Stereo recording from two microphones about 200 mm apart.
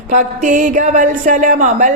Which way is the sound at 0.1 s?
40° right (ahead or behind).